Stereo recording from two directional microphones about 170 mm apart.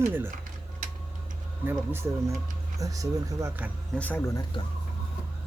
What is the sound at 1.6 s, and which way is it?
Speech, 10° right (ahead or behind).